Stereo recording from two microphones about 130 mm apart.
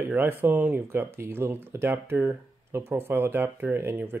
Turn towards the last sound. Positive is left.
turn(degrees=-15)  # may be behind; listen again after turning